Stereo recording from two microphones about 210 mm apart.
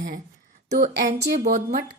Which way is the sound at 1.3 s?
35° right (ahead or behind).